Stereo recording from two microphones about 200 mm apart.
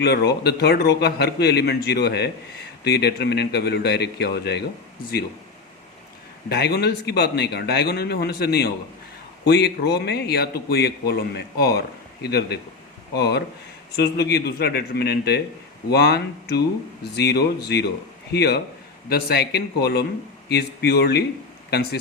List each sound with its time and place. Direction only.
0.0 s speech: 55° left (ahead or behind)
6.5 s speech: 55° left (ahead or behind)